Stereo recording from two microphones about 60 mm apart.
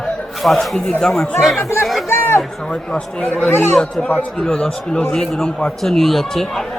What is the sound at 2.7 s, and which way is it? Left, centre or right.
Speech, centre.